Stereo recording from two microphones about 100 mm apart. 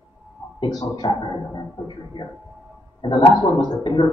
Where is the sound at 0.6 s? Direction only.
45° left (ahead or behind).